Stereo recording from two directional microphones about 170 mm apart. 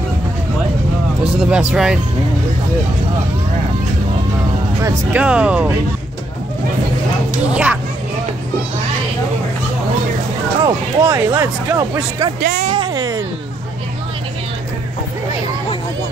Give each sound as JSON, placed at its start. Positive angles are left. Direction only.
{"t": 1.2, "sound": "speech", "side_deg": -5}
{"t": 4.8, "sound": "speech", "side_deg": -10}
{"t": 7.5, "sound": "speech", "side_deg": -10}
{"t": 10.6, "sound": "speech", "side_deg": -15}
{"t": 12.6, "sound": "a sound", "side_deg": -30}